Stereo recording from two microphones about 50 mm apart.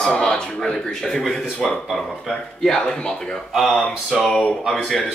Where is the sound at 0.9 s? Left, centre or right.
Centre.